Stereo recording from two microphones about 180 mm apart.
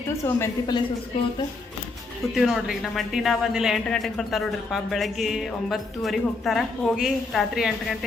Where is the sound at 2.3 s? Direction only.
Centre (ahead or behind).